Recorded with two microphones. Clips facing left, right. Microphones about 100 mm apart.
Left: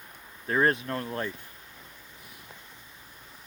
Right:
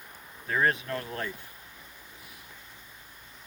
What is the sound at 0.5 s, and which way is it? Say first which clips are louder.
Speech: left 2 dB; 35° left (ahead or behind).